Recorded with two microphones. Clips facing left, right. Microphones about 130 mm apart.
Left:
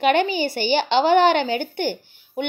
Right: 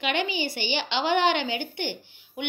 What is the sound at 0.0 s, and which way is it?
A child's voice, 45° left (ahead or behind).